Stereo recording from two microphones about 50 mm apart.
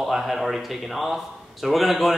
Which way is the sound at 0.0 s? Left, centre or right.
Centre.